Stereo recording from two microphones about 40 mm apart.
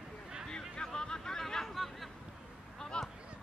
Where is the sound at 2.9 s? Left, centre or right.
Left.